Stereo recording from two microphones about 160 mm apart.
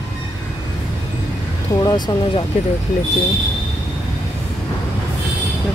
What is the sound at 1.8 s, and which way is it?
Speech, 25° left (ahead or behind).